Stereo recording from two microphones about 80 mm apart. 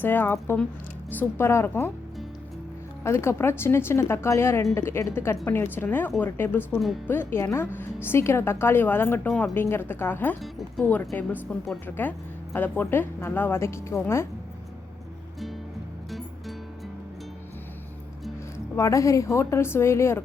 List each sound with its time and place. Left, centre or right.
0.0 s a woman's voice: left
3.0 s a woman's voice: left
12.5 s a woman's voice: left
18.8 s a woman's voice: left